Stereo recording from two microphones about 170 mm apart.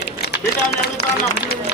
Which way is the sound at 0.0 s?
75° left (ahead or behind).